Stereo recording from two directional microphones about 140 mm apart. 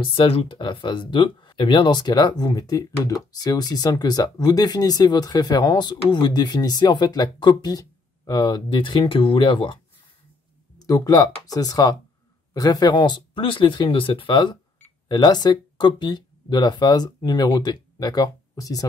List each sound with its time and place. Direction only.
0.0 s speech: 35° left (ahead or behind)
10.8 s speech: 25° left (ahead or behind)